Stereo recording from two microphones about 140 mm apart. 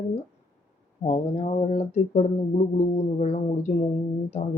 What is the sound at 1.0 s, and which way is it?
Speech, 50° left (ahead or behind).